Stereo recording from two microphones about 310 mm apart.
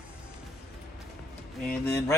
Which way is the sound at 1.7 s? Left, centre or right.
Centre.